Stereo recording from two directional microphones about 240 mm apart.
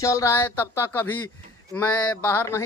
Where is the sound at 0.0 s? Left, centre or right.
Centre.